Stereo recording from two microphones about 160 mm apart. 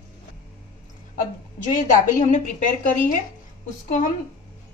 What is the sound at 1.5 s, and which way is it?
A woman's voice, 50° left (ahead or behind).